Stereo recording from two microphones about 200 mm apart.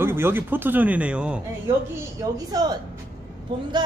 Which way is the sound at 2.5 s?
20° right (ahead or behind).